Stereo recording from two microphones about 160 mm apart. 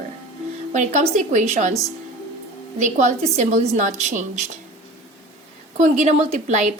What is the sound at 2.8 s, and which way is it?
A woman's voice, 50° right (ahead or behind).